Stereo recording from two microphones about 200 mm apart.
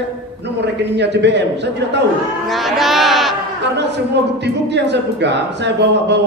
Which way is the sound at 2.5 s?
Centre (ahead or behind).